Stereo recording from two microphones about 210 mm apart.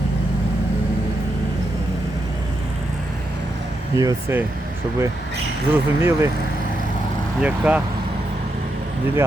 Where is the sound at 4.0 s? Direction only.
15° right (ahead or behind).